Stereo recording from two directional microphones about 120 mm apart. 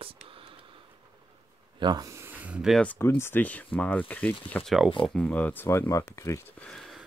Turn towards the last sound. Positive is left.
turn(degrees=0)  # may be behind; listen again after turning